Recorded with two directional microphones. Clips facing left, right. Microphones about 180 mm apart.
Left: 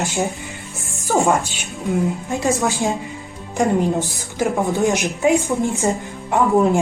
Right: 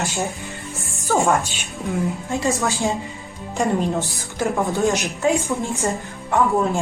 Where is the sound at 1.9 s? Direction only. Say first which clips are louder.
Left 3 dB; 15° left (ahead or behind).